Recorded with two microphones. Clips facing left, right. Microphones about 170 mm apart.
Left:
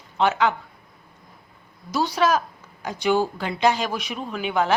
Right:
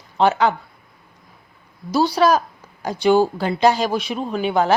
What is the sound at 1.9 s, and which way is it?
Speech, 35° right (ahead or behind).